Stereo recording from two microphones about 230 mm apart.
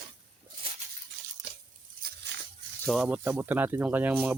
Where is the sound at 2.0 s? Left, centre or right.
Right.